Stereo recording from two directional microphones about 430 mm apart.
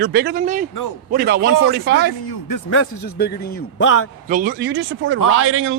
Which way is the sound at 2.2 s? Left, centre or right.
Left.